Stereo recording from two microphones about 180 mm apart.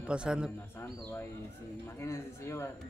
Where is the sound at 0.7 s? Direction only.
10° left (ahead or behind).